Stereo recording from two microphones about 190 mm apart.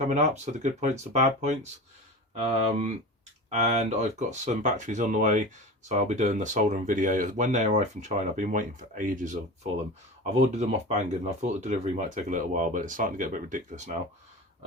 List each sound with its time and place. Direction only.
0.0 s speech: 35° right (ahead or behind)